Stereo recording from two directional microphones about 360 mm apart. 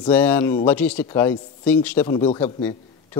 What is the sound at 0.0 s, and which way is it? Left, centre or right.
A man's voice, centre.